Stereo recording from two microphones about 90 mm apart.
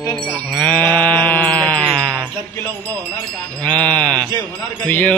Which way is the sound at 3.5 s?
10° left (ahead or behind).